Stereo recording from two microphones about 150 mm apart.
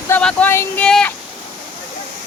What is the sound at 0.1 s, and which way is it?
Female singing, 5° left (ahead or behind).